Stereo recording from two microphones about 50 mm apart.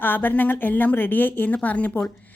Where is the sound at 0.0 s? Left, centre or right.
Left.